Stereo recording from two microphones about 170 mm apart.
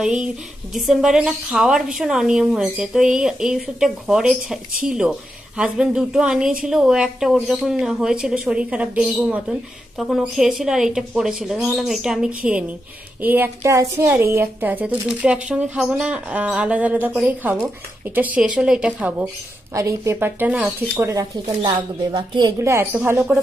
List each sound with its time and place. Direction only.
0.0 s a woman's voice: 5° right (ahead or behind); by 22.5 s 25° right (ahead or behind)
22.6 s a woman's voice: 15° right (ahead or behind)